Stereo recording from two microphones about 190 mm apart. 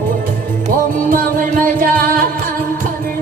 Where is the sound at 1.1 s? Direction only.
45° right (ahead or behind).